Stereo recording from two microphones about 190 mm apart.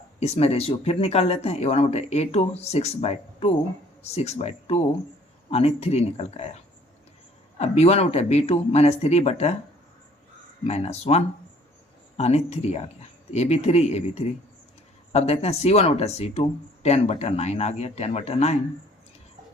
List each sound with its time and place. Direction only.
0.2 s speech: 35° left (ahead or behind)
7.6 s speech: 35° left (ahead or behind)
10.6 s speech: 35° left (ahead or behind)